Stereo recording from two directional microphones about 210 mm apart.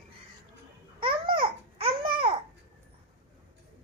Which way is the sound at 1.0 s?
25° right (ahead or behind).